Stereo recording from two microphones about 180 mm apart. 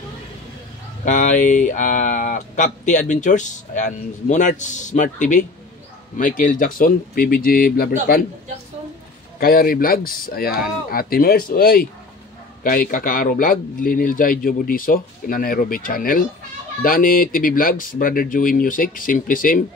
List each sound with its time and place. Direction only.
1.0 s speech: 45° left (ahead or behind)
9.4 s speech: 55° left (ahead or behind)